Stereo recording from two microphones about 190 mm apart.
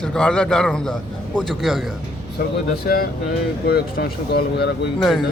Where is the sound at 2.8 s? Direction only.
50° left (ahead or behind).